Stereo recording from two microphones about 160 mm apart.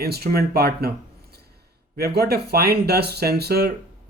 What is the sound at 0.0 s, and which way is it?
Speech, 75° right (ahead or behind).